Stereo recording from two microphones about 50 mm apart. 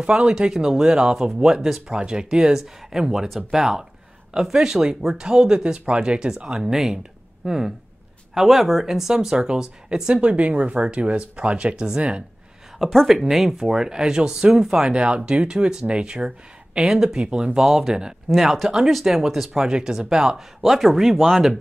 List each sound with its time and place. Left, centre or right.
0.0 s speech: centre
6.6 s speech: centre
12.7 s speech: centre